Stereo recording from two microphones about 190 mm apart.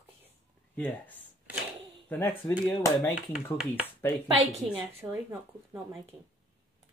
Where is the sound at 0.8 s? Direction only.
10° left (ahead or behind).